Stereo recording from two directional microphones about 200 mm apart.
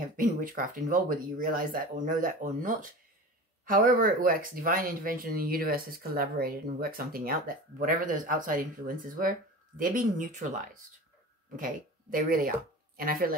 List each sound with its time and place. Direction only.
0.0 s speech: 40° right (ahead or behind)